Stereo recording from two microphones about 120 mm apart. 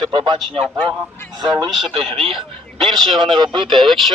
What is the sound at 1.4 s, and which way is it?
A man's voice, 45° right (ahead or behind).